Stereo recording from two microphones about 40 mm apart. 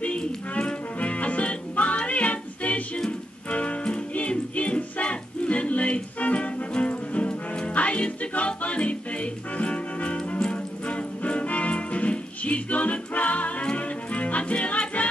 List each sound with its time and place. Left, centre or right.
0.2 s music: left
0.9 s music: left